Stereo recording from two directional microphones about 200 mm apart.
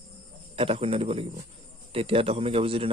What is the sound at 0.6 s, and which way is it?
Speech, 30° right (ahead or behind).